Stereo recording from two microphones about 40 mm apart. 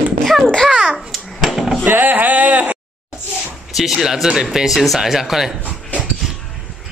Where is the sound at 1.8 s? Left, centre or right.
Right.